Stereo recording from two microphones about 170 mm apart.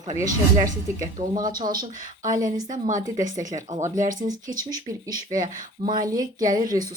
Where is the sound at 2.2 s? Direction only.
50° right (ahead or behind).